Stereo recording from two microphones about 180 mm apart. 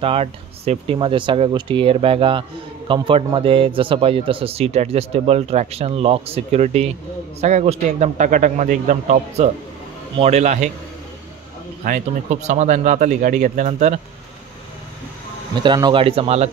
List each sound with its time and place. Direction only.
0.0 s speech: 35° right (ahead or behind)
11.8 s speech: 45° right (ahead or behind)
15.6 s speech: 25° right (ahead or behind)